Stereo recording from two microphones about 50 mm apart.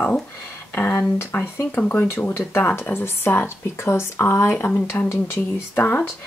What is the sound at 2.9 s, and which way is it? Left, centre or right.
Speech, left.